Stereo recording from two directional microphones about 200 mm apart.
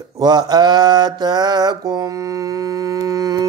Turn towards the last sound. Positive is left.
turn(degrees=-15)  # may be behind; listen again after turning